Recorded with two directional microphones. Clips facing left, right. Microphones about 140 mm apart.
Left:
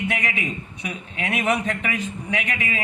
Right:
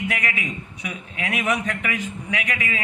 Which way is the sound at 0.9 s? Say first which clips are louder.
Left 1 dB; 35° left (ahead or behind).